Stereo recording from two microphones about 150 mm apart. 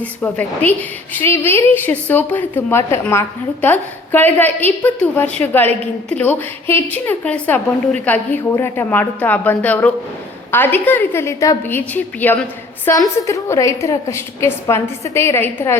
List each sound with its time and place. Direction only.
0.0 s a woman's voice: 10° left (ahead or behind)